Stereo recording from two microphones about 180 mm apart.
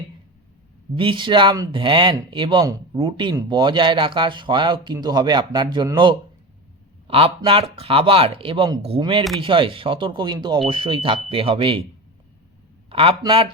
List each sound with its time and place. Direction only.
0.9 s speech: 25° right (ahead or behind)
12.9 s speech: 30° right (ahead or behind)